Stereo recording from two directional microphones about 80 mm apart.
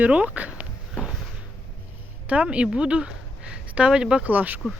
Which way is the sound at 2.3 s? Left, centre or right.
Centre.